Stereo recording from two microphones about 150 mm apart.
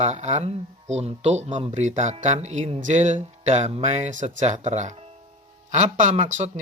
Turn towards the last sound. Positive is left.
turn(degrees=-50)  # may be behind; listen again after turning